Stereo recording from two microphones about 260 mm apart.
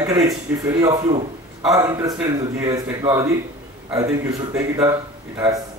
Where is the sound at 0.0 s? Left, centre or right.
Centre.